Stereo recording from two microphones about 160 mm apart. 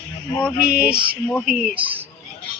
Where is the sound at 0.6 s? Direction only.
5° right (ahead or behind).